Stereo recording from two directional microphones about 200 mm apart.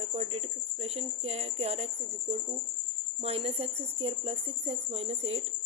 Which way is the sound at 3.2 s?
30° right (ahead or behind).